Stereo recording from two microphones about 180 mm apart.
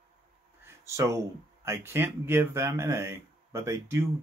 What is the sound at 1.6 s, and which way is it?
Speech, 15° right (ahead or behind).